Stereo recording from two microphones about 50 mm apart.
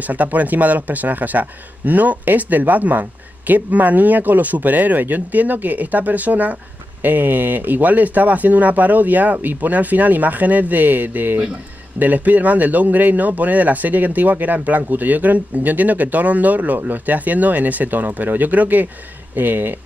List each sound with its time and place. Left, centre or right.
0.0 s speech: right